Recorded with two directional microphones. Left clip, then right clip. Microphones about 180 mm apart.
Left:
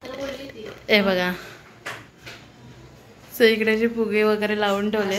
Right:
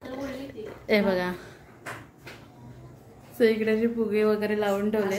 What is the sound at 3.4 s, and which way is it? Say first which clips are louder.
Speech: left 5 dB; 10° left (ahead or behind).